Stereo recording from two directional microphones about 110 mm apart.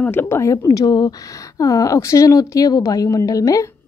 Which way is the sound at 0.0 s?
20° left (ahead or behind).